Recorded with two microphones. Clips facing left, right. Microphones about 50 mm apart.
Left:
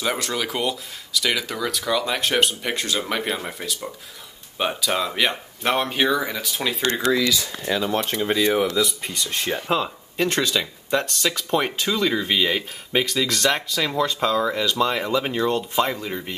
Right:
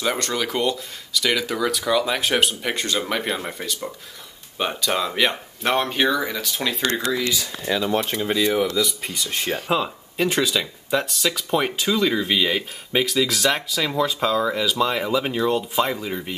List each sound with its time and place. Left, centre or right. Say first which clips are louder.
0.0 s speech: right 1 dB; centre
7.1 s speech: left 7 dB; left
7.4 s speech: right 1 dB; centre
8.5 s speech: left 1 dB; centre